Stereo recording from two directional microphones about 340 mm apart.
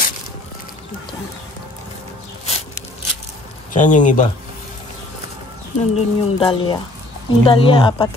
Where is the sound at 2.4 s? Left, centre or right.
Centre.